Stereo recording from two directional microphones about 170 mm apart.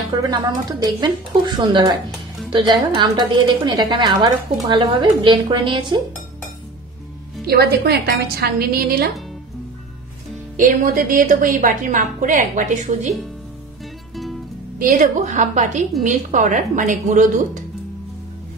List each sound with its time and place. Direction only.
0.2 s a woman's voice: 25° right (ahead or behind)
7.4 s a woman's voice: 65° right (ahead or behind)
10.6 s a woman's voice: 55° right (ahead or behind)
14.8 s a woman's voice: 50° right (ahead or behind)